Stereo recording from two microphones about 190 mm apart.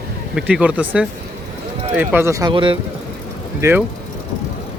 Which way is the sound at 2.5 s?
25° right (ahead or behind).